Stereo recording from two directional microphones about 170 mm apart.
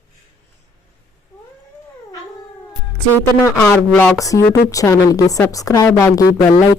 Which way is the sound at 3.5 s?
10° left (ahead or behind).